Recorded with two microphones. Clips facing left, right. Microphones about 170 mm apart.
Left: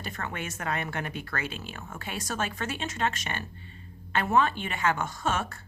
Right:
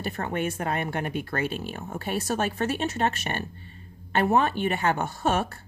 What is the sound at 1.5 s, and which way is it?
Speech, 55° right (ahead or behind).